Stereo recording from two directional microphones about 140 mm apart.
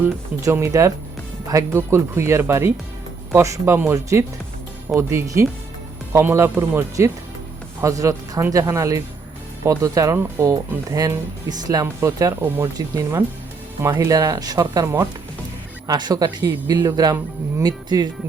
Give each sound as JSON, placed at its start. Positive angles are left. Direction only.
{"t": 0.0, "sound": "speech", "side_deg": -15}